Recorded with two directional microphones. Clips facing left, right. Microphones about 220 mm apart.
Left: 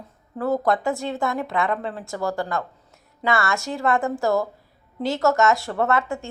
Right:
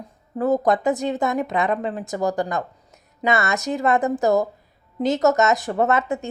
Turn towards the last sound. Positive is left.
turn(degrees=-20)  # may be behind; listen again after turning